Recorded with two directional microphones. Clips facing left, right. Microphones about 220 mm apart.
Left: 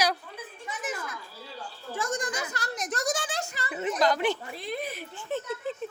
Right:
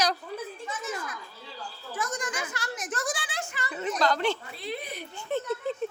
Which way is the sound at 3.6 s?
20° left (ahead or behind).